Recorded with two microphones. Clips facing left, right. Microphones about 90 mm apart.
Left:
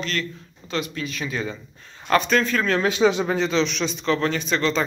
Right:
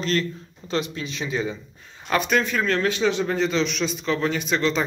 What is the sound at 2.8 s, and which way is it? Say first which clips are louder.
Speech: left 3 dB; 15° left (ahead or behind).